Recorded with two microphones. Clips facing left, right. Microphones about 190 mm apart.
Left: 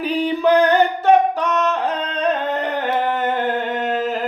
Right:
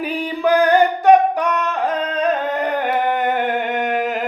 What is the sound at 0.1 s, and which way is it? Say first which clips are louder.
Singing: left 2 dB; 10° right (ahead or behind).